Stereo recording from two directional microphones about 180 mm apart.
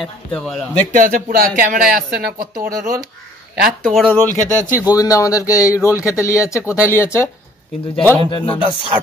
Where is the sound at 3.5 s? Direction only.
55° right (ahead or behind).